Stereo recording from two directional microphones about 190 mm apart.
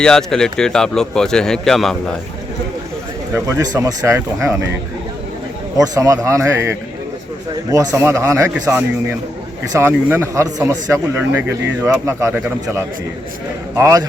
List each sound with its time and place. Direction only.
0.0 s a man's voice: 5° left (ahead or behind)
3.3 s speech: 15° right (ahead or behind)
5.7 s speech: 20° right (ahead or behind)